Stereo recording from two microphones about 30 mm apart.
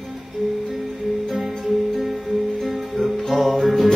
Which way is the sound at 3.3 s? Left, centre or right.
Centre.